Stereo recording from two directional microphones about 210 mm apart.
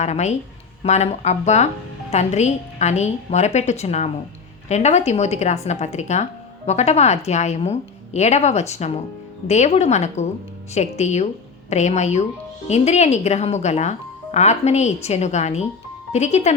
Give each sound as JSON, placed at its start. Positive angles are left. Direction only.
{"t": 0.0, "sound": "speech", "side_deg": 35}